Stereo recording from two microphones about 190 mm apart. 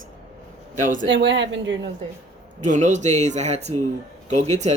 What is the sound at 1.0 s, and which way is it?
Speech, 70° right (ahead or behind).